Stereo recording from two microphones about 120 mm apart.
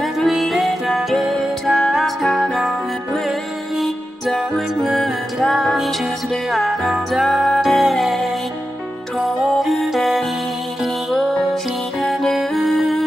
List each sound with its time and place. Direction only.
0.0 s music: centre (ahead or behind)
9.6 s music: centre (ahead or behind)